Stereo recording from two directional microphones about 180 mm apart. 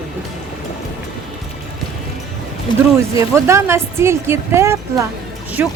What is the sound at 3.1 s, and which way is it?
Speech, 15° right (ahead or behind).